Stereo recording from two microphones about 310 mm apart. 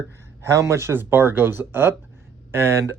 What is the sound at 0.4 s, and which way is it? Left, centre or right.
Speech, centre.